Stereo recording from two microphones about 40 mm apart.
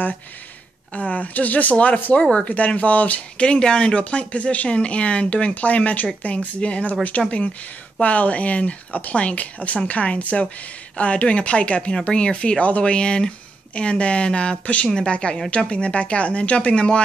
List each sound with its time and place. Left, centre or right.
0.9 s speech: left
3.3 s speech: left